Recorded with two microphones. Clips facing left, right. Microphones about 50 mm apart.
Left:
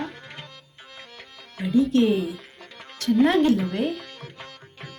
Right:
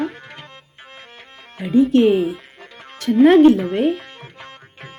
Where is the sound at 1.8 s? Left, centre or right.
Right.